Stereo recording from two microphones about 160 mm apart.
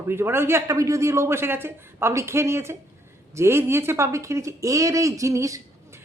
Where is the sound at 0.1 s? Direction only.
15° right (ahead or behind).